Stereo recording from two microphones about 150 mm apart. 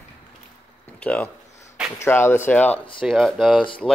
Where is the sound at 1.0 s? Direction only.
10° left (ahead or behind).